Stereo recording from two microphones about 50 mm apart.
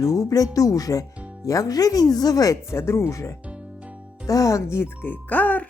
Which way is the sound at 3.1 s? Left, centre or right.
Left.